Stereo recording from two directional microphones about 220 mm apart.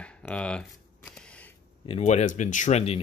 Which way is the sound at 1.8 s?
30° left (ahead or behind).